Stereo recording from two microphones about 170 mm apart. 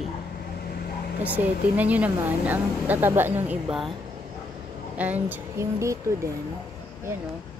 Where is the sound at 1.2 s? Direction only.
10° right (ahead or behind).